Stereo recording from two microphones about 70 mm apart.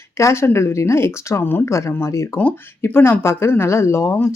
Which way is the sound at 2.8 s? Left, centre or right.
Left.